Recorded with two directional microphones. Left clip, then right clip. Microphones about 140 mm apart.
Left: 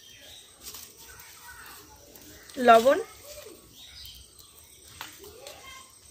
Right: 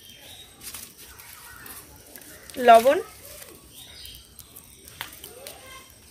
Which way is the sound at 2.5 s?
40° right (ahead or behind).